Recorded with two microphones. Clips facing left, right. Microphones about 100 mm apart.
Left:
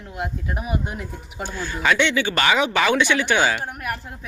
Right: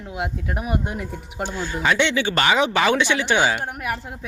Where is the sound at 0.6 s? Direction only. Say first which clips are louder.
Right 2 dB; 65° right (ahead or behind).